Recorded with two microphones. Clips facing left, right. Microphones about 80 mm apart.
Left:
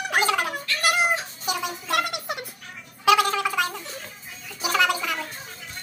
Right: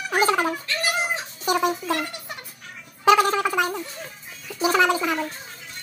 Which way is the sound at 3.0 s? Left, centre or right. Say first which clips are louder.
Right 2 dB; right.